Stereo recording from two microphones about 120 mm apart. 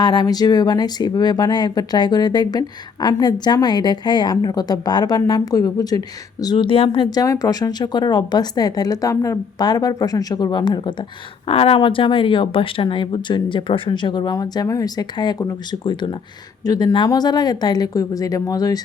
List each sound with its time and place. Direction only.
0.0 s speech: 35° left (ahead or behind)
11.4 s speech: 55° left (ahead or behind); by 18.8 s 30° left (ahead or behind)